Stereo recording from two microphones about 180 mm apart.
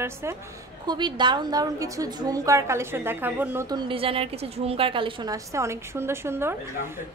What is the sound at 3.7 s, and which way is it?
A woman's voice, 30° right (ahead or behind).